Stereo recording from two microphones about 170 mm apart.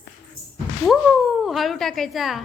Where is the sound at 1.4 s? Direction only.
Centre (ahead or behind).